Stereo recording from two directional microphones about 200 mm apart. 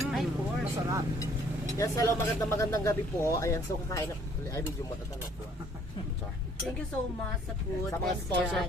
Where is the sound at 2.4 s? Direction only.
15° left (ahead or behind).